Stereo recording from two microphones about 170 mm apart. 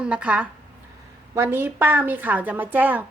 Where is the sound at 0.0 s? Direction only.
5° right (ahead or behind).